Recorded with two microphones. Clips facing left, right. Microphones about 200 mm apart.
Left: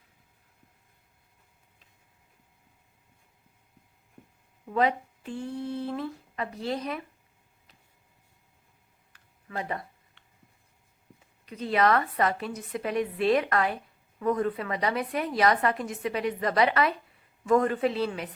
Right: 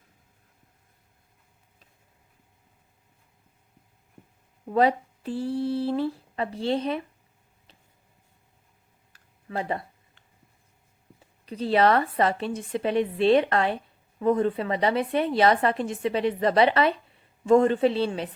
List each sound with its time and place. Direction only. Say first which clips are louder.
4.6 s speech: right 4 dB; 35° right (ahead or behind)
9.1 s a sound: right 4 dB; 30° right (ahead or behind)
11.4 s a woman's voice: right 3 dB; 30° right (ahead or behind)